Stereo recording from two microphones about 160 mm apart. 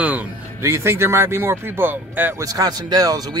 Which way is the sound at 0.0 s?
10° right (ahead or behind).